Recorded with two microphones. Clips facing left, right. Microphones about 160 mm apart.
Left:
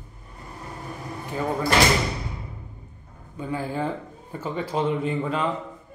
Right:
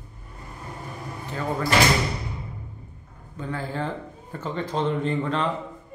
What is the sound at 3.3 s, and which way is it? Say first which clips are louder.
Speech: left 2 dB; 10° left (ahead or behind).